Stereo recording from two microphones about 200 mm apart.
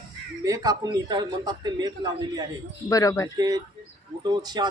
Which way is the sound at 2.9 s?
15° left (ahead or behind).